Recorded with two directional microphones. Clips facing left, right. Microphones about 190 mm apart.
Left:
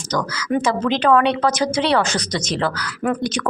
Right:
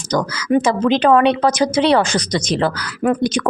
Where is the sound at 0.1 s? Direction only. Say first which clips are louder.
Right 5 dB; 15° right (ahead or behind).